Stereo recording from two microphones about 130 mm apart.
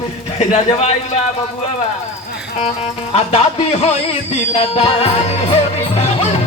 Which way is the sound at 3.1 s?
55° left (ahead or behind).